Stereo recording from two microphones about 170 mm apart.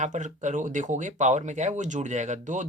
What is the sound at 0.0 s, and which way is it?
Speech, 45° right (ahead or behind).